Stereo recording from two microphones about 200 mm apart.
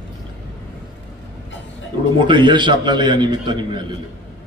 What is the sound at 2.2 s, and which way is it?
A man's voice, 25° right (ahead or behind).